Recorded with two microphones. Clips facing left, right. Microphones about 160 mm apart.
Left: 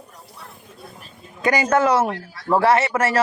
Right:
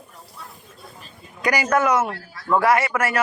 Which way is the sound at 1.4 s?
25° left (ahead or behind).